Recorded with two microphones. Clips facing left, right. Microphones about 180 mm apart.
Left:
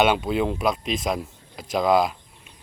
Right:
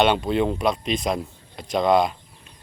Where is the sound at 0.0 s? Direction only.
5° left (ahead or behind).